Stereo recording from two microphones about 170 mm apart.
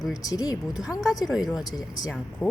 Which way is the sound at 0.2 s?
20° left (ahead or behind).